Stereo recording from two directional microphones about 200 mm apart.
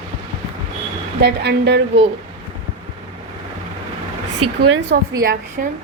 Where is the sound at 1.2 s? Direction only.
55° right (ahead or behind).